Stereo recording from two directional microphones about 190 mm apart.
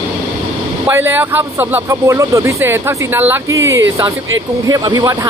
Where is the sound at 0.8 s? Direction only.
10° right (ahead or behind).